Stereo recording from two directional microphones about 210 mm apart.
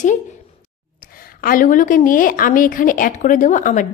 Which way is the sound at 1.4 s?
40° left (ahead or behind).